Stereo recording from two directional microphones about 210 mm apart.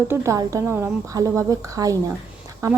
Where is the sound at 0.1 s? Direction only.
15° right (ahead or behind).